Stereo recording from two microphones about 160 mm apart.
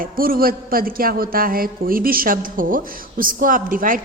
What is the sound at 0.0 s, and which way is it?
A man's voice, 65° right (ahead or behind).